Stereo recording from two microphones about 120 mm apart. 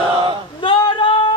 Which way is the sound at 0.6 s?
40° left (ahead or behind).